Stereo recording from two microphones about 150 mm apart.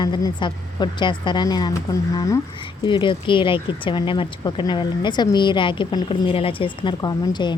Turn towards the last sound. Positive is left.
turn(degrees=30)  # may be behind; listen again after turning